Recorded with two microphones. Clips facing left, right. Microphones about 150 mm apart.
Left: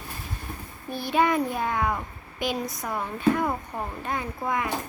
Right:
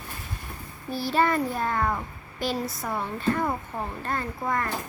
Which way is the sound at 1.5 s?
Centre (ahead or behind).